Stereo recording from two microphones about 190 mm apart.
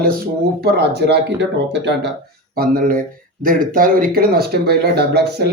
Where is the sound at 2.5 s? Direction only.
50° right (ahead or behind).